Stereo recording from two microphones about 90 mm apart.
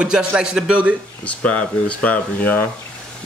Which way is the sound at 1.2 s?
15° left (ahead or behind).